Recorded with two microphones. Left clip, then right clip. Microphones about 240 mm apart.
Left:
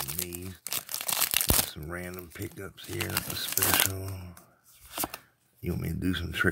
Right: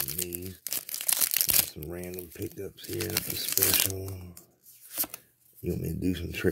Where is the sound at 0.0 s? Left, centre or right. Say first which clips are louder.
Right 1 dB; centre.